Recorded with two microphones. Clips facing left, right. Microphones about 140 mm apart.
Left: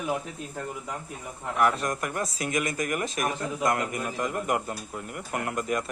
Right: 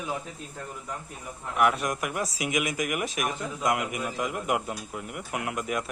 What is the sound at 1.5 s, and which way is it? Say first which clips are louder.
Speech: even; 10° right (ahead or behind).